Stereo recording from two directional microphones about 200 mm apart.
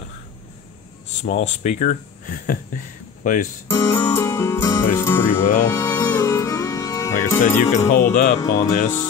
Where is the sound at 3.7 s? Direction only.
10° left (ahead or behind).